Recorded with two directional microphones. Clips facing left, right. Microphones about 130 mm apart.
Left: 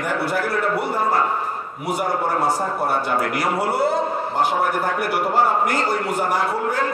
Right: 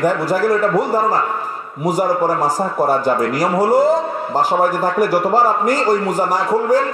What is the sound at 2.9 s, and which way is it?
A man's voice, 40° right (ahead or behind).